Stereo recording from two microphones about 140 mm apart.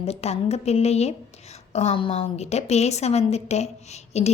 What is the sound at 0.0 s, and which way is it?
A woman's voice, 45° left (ahead or behind).